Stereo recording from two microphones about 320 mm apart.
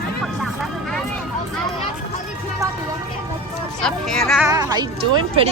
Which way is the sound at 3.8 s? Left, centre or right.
Centre.